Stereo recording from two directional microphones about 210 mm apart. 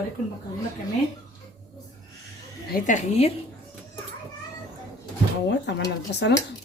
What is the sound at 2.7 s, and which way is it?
Speech, 35° left (ahead or behind).